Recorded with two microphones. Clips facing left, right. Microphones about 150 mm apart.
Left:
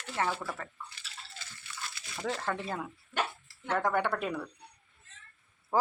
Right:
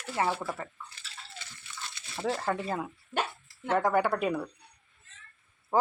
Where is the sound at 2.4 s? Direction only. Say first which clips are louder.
Right 4 dB; 10° right (ahead or behind).